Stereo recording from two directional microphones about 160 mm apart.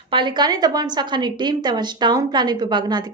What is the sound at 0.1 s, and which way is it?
A woman's voice, 30° right (ahead or behind).